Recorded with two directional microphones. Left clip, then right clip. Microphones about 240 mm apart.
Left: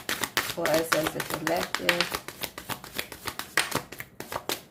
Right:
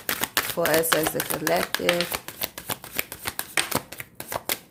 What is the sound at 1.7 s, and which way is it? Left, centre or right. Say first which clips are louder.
Shuffling cards: right 2 dB; right.